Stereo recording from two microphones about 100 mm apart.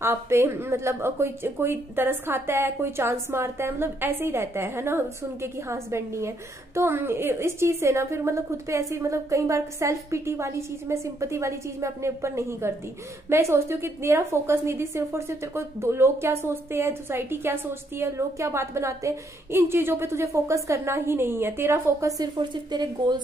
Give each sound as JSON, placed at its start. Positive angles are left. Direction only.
{"t": 0.0, "sound": "a woman's voice", "side_deg": -25}
{"t": 22.2, "sound": "a woman's voice", "side_deg": -50}